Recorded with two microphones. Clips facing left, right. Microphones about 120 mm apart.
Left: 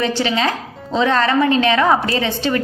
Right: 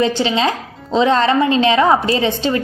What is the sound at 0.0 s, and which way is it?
A woman's voice, 20° right (ahead or behind).